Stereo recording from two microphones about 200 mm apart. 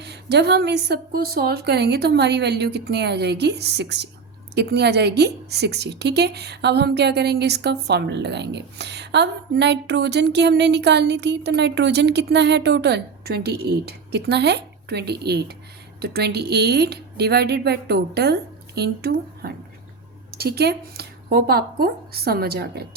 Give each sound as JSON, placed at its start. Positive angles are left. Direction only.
{"t": 0.0, "sound": "a woman's voice", "side_deg": -55}